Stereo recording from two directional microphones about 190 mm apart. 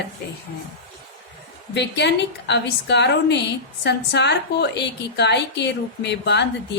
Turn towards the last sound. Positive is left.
turn(degrees=65)  # may be behind; listen again after turning